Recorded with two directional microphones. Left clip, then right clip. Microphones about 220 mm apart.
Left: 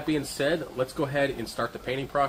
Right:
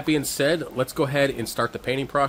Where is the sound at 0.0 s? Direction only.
55° right (ahead or behind).